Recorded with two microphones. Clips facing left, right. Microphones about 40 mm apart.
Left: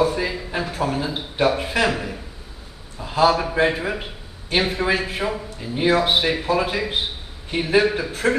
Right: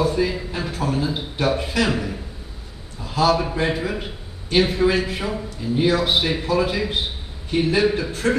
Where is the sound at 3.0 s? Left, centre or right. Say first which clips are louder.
Left 1 dB; left.